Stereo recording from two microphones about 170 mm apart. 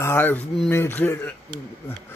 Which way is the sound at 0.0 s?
15° left (ahead or behind).